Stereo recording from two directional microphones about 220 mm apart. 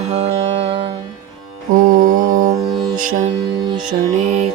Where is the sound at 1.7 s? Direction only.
40° right (ahead or behind).